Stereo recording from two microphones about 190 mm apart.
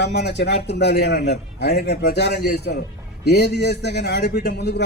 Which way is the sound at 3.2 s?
60° left (ahead or behind).